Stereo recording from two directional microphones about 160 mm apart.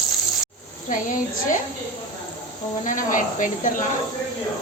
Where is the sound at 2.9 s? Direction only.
55° left (ahead or behind).